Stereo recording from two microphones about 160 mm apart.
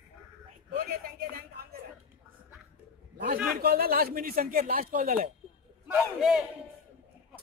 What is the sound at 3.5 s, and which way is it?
Speech, 65° right (ahead or behind).